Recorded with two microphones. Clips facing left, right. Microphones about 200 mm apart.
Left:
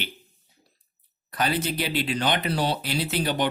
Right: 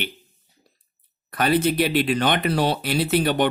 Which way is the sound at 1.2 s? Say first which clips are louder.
Right 6 dB; 55° right (ahead or behind).